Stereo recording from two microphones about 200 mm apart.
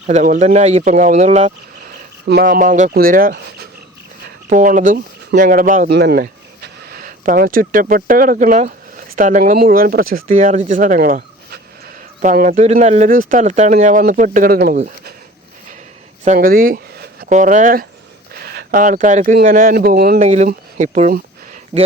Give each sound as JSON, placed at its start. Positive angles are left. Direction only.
{"t": 0.1, "sound": "speech", "side_deg": -35}
{"t": 2.2, "sound": "speech", "side_deg": -50}
{"t": 5.9, "sound": "speech", "side_deg": -55}
{"t": 16.2, "sound": "speech", "side_deg": -40}
{"t": 20.1, "sound": "speech", "side_deg": -35}